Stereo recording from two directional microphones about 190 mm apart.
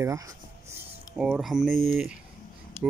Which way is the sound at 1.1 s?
5° right (ahead or behind).